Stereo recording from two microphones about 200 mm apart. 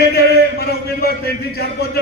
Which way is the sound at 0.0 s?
55° left (ahead or behind).